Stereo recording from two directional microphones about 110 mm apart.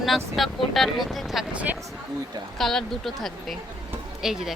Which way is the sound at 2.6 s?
Centre (ahead or behind).